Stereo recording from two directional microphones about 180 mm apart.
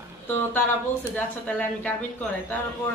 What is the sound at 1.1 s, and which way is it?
Speech, 10° left (ahead or behind).